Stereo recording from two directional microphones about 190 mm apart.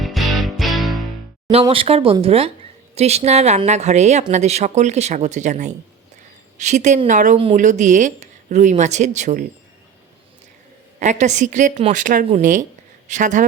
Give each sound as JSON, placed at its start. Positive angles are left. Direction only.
{"t": 0.0, "sound": "music", "side_deg": 0}
{"t": 1.6, "sound": "speech", "side_deg": -30}
{"t": 11.0, "sound": "speech", "side_deg": -40}